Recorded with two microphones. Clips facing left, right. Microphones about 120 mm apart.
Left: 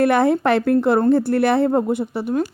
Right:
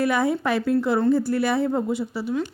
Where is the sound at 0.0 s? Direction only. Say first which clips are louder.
Left 6 dB; 60° left (ahead or behind).